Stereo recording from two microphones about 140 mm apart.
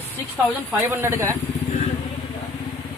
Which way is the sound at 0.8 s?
15° right (ahead or behind).